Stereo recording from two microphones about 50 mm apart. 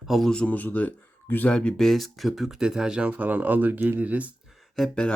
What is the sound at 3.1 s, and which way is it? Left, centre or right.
Speech, right.